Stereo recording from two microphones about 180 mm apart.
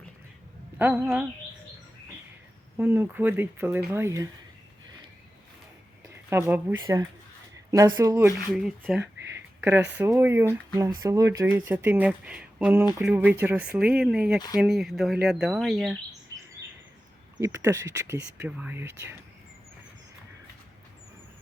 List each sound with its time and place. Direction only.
0.8 s speech: 10° right (ahead or behind)
2.7 s speech: 10° right (ahead or behind)
6.3 s speech: 10° right (ahead or behind)
8.4 s speech: centre (ahead or behind)
9.6 s speech: 15° right (ahead or behind)
17.3 s speech: 15° right (ahead or behind)